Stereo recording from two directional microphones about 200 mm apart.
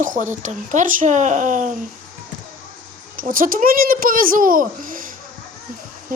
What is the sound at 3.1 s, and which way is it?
A child's voice, 45° right (ahead or behind).